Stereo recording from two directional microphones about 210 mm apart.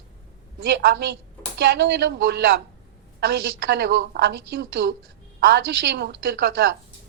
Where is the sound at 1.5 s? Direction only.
55° right (ahead or behind).